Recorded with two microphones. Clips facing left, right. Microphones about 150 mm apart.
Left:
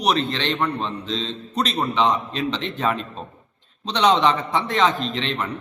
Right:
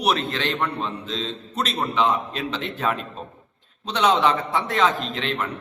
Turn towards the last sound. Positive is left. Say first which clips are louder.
# left 1 dB
turn(degrees=-5)  # may be behind; listen again after turning